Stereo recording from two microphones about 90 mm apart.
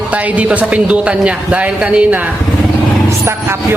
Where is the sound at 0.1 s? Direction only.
15° right (ahead or behind).